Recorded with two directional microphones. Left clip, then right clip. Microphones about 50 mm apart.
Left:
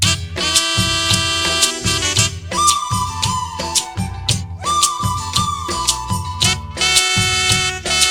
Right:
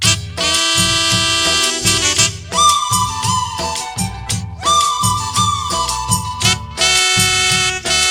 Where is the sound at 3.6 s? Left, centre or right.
Right.